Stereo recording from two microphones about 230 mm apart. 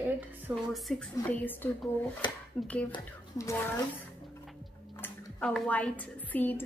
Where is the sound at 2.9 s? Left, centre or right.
Centre.